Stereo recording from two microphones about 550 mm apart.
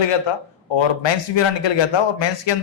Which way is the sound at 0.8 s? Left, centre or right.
Left.